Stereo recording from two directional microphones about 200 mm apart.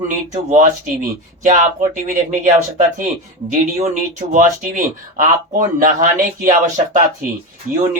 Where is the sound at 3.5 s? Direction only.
35° right (ahead or behind).